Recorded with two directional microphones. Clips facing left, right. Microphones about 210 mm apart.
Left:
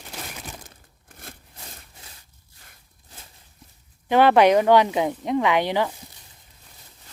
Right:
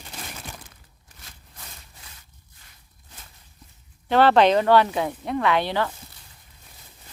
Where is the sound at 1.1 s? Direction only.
55° left (ahead or behind).